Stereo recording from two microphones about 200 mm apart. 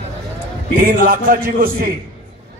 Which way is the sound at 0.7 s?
45° right (ahead or behind).